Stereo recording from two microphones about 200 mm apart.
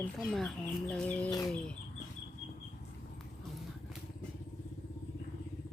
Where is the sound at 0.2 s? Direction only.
Centre (ahead or behind).